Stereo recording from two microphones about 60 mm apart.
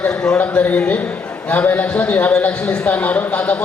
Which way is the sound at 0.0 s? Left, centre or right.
Left.